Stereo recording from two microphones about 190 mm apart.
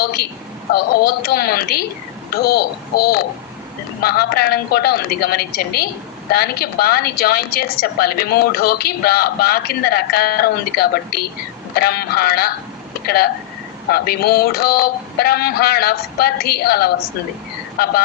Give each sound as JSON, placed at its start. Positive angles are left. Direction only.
{"t": 0.0, "sound": "a woman's voice", "side_deg": 55}